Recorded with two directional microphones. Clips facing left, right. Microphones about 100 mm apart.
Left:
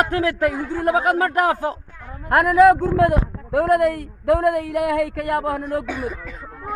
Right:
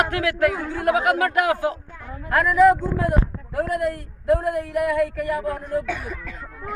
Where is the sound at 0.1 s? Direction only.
35° left (ahead or behind).